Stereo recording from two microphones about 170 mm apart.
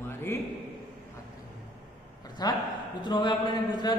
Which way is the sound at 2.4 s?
25° left (ahead or behind).